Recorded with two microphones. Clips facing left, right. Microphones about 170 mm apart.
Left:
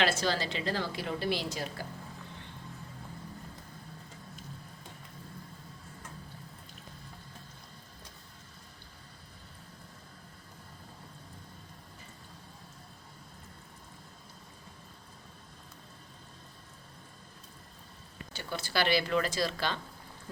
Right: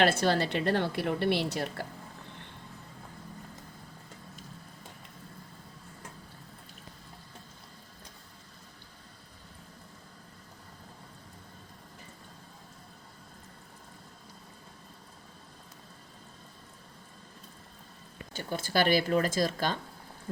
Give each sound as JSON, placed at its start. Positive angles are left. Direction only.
{"t": 0.0, "sound": "a woman's voice", "side_deg": -55}
{"t": 18.3, "sound": "speech", "side_deg": -50}